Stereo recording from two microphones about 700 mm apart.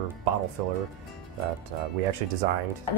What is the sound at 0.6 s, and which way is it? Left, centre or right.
Speech, right.